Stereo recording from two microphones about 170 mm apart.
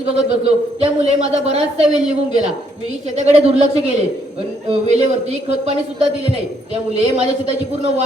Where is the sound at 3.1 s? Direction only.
40° right (ahead or behind).